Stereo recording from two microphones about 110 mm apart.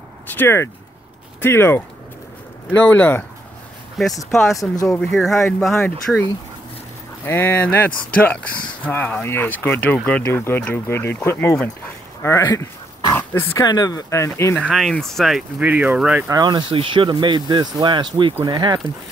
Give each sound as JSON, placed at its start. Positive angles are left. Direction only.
{"t": 0.3, "sound": "speech", "side_deg": 20}
{"t": 2.8, "sound": "speech", "side_deg": 15}
{"t": 4.0, "sound": "speech", "side_deg": 0}
{"t": 4.5, "sound": "speech", "side_deg": 30}
{"t": 4.8, "sound": "speech", "side_deg": 5}
{"t": 7.2, "sound": "speech", "side_deg": 20}
{"t": 12.4, "sound": "dog", "side_deg": 40}
{"t": 13.1, "sound": "pig", "side_deg": 20}
{"t": 13.6, "sound": "speech", "side_deg": 35}
{"t": 14.7, "sound": "speech", "side_deg": 0}
{"t": 15.6, "sound": "speech", "side_deg": -15}
{"t": 16.3, "sound": "speech", "side_deg": -40}